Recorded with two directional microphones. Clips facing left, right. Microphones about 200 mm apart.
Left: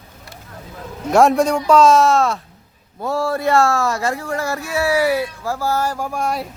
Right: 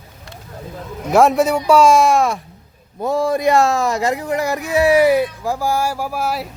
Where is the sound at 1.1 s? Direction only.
Centre (ahead or behind).